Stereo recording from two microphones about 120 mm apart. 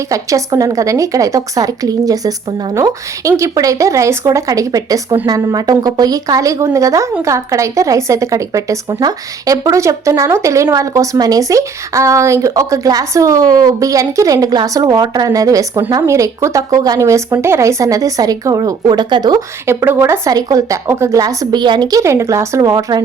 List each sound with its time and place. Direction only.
0.1 s a woman's voice: 30° right (ahead or behind)
19.6 s a woman's voice: 20° right (ahead or behind)